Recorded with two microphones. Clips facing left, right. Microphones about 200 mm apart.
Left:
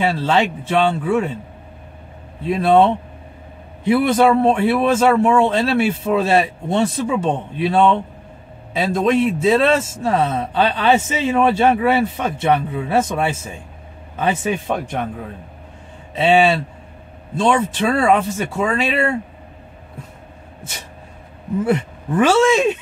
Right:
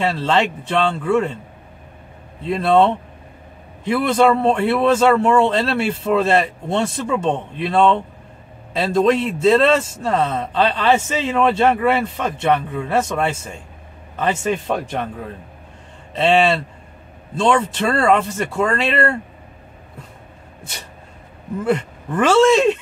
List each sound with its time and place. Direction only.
0.0 s speech: centre (ahead or behind)
2.4 s speech: 5° left (ahead or behind)
3.8 s speech: 15° left (ahead or behind)
16.2 s speech: 5° left (ahead or behind)
21.6 s speech: centre (ahead or behind)